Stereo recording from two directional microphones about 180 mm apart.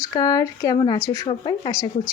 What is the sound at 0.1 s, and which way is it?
Speech, 20° left (ahead or behind).